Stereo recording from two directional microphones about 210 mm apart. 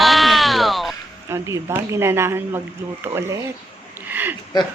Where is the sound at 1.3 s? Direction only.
15° right (ahead or behind).